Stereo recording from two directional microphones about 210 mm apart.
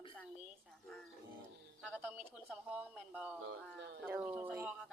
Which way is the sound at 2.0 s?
5° right (ahead or behind).